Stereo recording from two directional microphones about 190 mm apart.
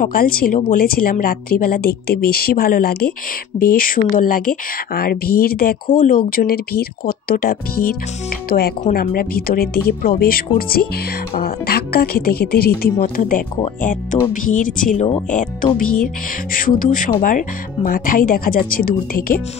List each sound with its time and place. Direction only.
0.0 s speech: 50° left (ahead or behind)
14.3 s speech: 45° left (ahead or behind)